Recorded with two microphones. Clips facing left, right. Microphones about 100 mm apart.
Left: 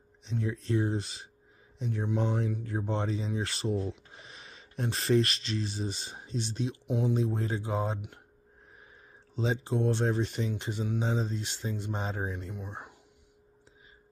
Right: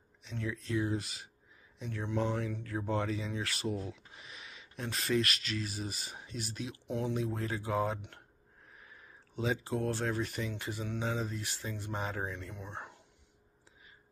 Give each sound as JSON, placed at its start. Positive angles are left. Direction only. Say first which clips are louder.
{"t": 0.2, "sound": "speech", "louder": "left 5 dB", "side_deg": 25}
{"t": 1.9, "sound": "speech", "louder": "left 3 dB", "side_deg": 20}
{"t": 6.9, "sound": "speech", "louder": "left 5 dB", "side_deg": 15}
{"t": 7.2, "sound": "speech", "louder": "left 4 dB", "side_deg": 30}
{"t": 9.4, "sound": "speech", "louder": "left 4 dB", "side_deg": 25}